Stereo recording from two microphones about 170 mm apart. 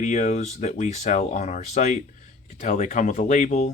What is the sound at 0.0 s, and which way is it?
Speech, 45° left (ahead or behind).